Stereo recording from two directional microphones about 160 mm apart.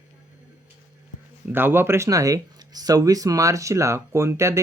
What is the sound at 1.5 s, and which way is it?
Speech, 15° right (ahead or behind).